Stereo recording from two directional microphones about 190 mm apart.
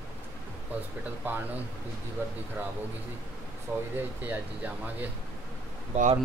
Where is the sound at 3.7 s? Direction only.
10° right (ahead or behind).